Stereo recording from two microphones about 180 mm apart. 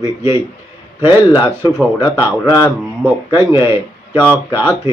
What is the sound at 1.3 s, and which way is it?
Speech, 20° left (ahead or behind).